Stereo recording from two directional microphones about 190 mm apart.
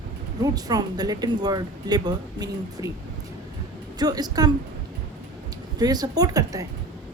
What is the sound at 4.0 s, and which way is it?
Speech, 20° right (ahead or behind).